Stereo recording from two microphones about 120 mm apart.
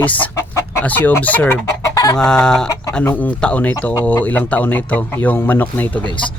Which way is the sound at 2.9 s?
15° left (ahead or behind).